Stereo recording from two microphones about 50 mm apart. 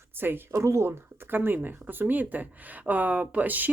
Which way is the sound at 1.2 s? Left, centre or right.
Right.